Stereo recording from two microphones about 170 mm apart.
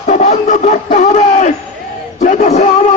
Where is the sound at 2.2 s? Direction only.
45° left (ahead or behind).